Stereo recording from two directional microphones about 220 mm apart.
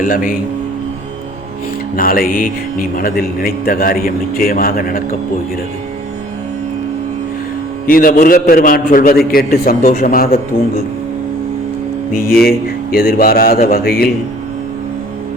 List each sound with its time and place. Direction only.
2.0 s a man's voice: 40° left (ahead or behind)
7.9 s a man's voice: 40° left (ahead or behind)
12.1 s a sound: 40° left (ahead or behind)